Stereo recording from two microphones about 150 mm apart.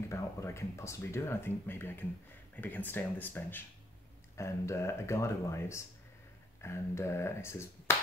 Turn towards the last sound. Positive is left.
turn(degrees=15)  # may be behind; listen again after turning